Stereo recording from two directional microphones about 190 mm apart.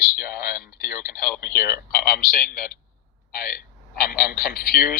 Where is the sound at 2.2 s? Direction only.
50° left (ahead or behind).